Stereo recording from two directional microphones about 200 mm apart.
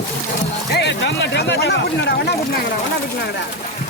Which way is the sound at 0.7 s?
60° left (ahead or behind).